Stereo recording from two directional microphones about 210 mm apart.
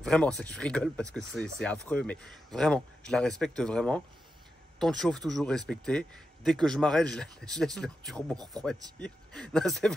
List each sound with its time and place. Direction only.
0.0 s speech: 5° left (ahead or behind)